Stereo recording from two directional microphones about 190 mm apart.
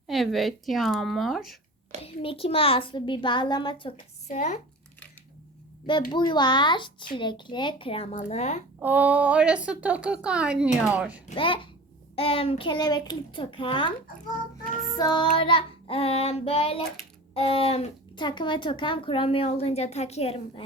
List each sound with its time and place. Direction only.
0.1 s speech: centre (ahead or behind)
2.0 s speech: 30° left (ahead or behind)
3.9 s speech: 40° left (ahead or behind)
6.1 s speech: 25° left (ahead or behind)
8.8 s a woman's voice: 10° right (ahead or behind)
11.3 s speech: 25° left (ahead or behind)
14.9 s speech: 20° left (ahead or behind)